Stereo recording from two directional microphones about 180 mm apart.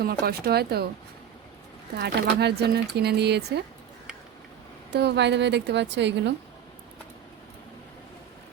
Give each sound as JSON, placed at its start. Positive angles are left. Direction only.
{"t": 0.0, "sound": "speech", "side_deg": -60}
{"t": 2.0, "sound": "speech", "side_deg": -65}
{"t": 4.9, "sound": "a woman's voice", "side_deg": -70}